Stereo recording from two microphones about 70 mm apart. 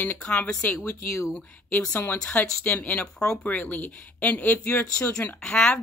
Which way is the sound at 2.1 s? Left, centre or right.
Centre.